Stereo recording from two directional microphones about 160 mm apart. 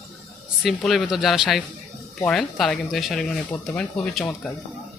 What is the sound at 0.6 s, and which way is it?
Speech, centre (ahead or behind).